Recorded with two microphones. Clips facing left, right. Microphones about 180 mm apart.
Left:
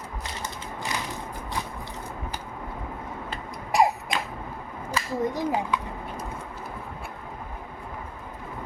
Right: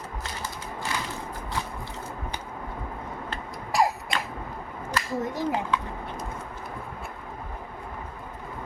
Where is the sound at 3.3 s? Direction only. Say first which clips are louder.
Left 3 dB; 15° left (ahead or behind).